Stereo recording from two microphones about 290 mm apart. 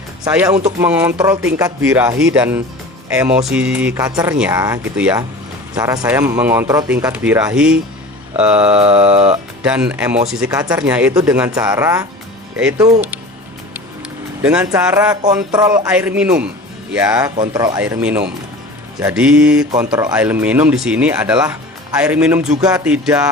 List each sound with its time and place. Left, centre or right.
0.3 s speech: centre
8.7 s speech: centre
9.6 s speech: centre
14.4 s speech: centre